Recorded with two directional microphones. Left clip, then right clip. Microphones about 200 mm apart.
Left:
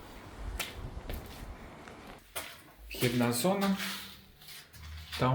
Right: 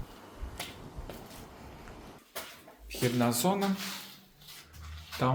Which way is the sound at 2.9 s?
10° right (ahead or behind).